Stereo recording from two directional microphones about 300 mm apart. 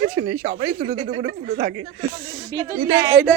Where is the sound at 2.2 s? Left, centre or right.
Centre.